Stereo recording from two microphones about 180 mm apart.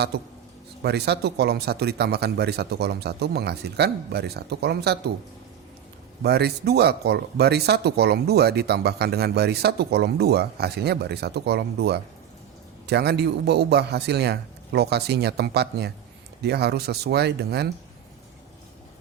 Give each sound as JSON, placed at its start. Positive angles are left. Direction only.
{"t": 0.8, "sound": "speech", "side_deg": -65}
{"t": 6.2, "sound": "speech", "side_deg": -65}